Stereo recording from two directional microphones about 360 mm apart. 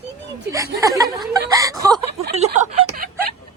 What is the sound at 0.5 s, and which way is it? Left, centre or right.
Speech, centre.